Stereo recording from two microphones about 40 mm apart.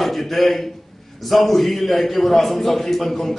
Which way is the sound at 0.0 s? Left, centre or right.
Centre.